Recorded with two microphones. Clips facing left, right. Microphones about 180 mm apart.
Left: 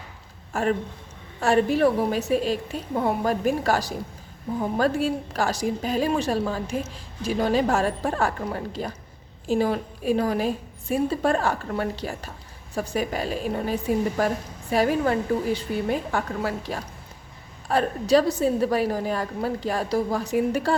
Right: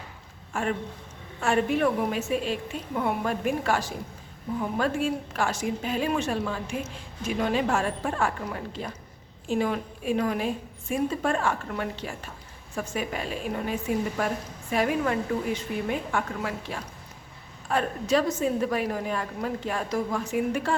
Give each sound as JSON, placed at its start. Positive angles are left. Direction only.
{"t": 0.5, "sound": "a woman's voice", "side_deg": 40}